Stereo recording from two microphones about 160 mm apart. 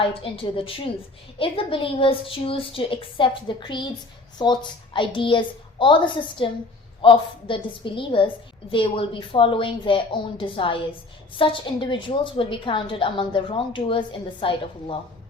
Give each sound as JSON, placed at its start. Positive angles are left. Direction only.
{"t": 0.0, "sound": "a woman's voice", "side_deg": 35}